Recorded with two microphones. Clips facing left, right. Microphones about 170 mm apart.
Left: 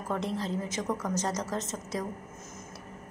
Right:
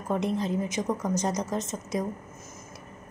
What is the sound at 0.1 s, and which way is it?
A woman's voice, 15° right (ahead or behind).